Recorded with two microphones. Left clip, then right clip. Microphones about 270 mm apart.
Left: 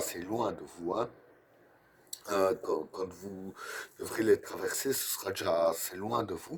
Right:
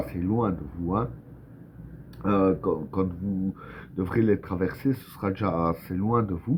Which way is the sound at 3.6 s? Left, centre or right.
Left.